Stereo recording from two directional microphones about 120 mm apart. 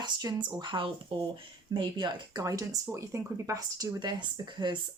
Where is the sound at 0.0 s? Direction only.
35° right (ahead or behind).